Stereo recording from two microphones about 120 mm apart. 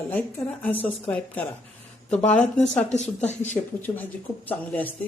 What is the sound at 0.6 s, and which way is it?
Speech, 15° left (ahead or behind).